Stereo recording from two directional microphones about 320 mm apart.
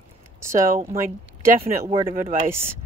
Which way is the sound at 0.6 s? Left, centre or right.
Right.